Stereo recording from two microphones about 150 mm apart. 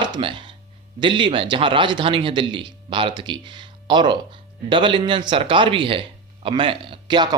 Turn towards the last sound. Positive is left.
turn(degrees=-30)  # may be behind; listen again after turning